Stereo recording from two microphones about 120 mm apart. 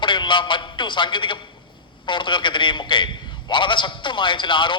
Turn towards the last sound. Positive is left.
turn(degrees=45)  # may be behind; listen again after turning